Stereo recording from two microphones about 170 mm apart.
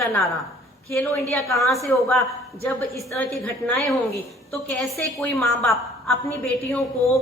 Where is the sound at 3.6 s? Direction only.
Centre (ahead or behind).